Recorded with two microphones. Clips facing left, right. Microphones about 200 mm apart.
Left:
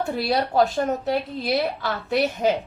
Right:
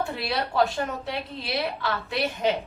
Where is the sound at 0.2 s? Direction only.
40° left (ahead or behind).